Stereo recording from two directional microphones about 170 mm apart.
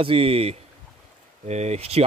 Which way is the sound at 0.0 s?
30° right (ahead or behind).